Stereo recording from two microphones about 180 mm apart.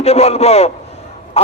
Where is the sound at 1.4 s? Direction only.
35° left (ahead or behind).